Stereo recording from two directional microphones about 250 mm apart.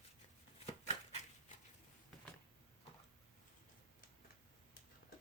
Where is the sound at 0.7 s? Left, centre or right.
Left.